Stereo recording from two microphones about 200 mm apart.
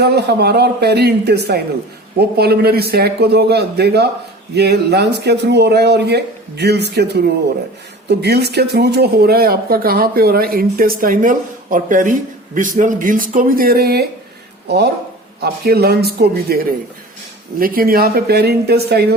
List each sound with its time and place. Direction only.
0.0 s speech: 55° right (ahead or behind)
15.4 s speech: 50° right (ahead or behind)